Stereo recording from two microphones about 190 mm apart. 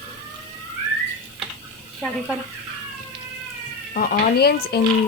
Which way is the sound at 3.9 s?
50° left (ahead or behind).